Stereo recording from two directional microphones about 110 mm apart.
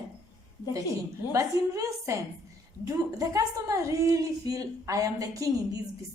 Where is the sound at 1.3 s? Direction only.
30° right (ahead or behind).